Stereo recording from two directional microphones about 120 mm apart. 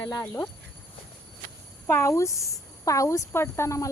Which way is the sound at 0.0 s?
30° left (ahead or behind).